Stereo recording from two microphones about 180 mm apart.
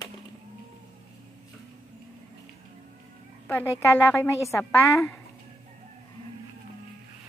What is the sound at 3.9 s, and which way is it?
A woman's voice, 10° left (ahead or behind).